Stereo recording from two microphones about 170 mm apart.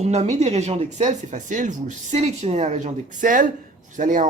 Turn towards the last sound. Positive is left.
turn(degrees=-50)  # may be behind; listen again after turning